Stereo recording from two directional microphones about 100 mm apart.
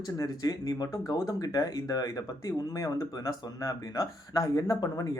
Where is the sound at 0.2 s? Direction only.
40° left (ahead or behind).